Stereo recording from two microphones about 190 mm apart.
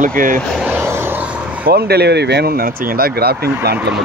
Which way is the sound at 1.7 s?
60° right (ahead or behind).